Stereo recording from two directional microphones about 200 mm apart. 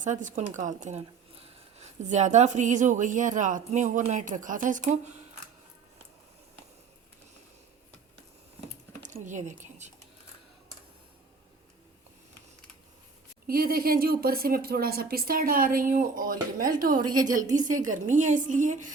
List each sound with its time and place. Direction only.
0.0 s speech: 40° right (ahead or behind)
9.0 s speech: 35° right (ahead or behind)
13.5 s speech: 45° right (ahead or behind)